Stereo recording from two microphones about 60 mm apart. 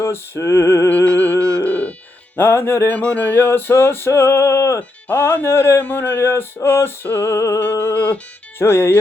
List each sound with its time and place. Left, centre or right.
0.0 s music: left
0.9 s music: left
4.8 s music: left
7.6 s music: left
8.5 s music: left